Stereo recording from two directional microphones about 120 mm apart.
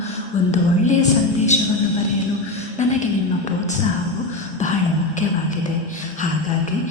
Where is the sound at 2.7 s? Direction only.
80° left.